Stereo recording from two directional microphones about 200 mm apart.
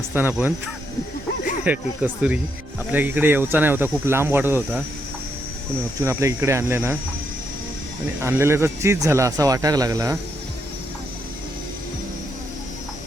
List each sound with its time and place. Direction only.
0.1 s speech: 10° right (ahead or behind)
1.6 s speech: 5° right (ahead or behind)
6.1 s speech: 15° right (ahead or behind)
8.2 s speech: 10° right (ahead or behind)